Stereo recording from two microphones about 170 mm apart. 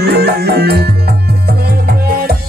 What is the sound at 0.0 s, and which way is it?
Music, 70° right (ahead or behind).